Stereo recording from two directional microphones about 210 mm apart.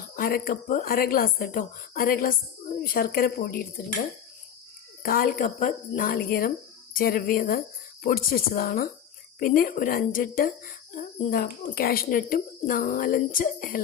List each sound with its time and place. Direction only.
0.2 s a woman's voice: 45° left (ahead or behind)
5.0 s a woman's voice: 45° left (ahead or behind)